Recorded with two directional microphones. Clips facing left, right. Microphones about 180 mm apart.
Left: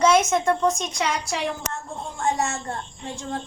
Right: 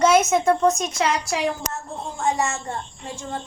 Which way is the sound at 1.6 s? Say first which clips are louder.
Right 1 dB; 35° right (ahead or behind).